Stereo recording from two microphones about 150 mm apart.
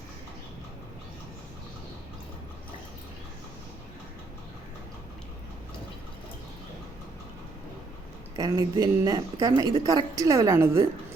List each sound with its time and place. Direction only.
8.4 s a woman's voice: 25° right (ahead or behind)